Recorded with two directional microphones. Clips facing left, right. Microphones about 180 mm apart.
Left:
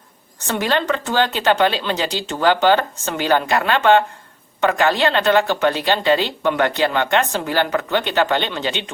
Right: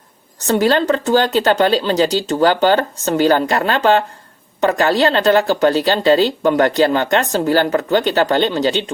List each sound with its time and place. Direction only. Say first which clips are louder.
0.3 s speech: right 6 dB; 40° right (ahead or behind)